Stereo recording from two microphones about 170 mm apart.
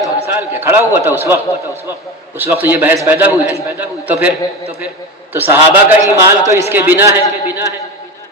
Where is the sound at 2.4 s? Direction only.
10° right (ahead or behind).